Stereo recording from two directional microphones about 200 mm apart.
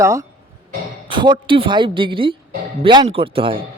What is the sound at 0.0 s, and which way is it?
Speech, 15° right (ahead or behind).